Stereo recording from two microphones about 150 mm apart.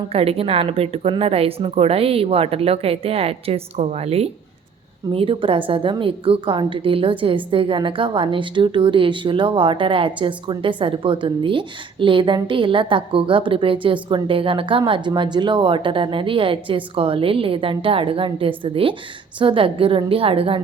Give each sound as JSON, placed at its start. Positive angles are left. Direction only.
{"t": 0.1, "sound": "a woman's voice", "side_deg": -40}